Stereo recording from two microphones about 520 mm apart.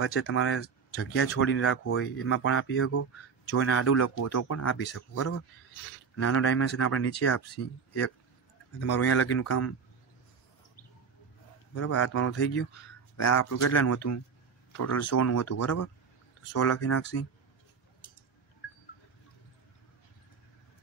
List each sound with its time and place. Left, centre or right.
0.0 s speech: left
11.7 s speech: left